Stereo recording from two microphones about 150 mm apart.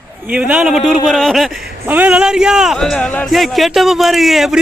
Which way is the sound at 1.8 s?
10° right (ahead or behind).